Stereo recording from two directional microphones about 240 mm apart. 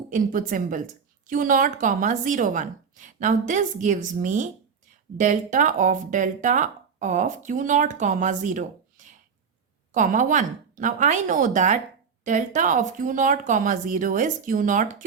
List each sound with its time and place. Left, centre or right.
0.1 s speech: right
9.9 s speech: right